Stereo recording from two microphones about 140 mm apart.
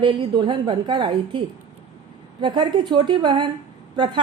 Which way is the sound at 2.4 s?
35° right (ahead or behind).